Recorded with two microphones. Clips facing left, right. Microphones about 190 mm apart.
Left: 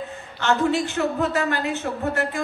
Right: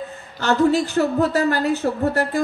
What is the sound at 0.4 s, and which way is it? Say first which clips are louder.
A woman's voice: right 4 dB; 40° right (ahead or behind).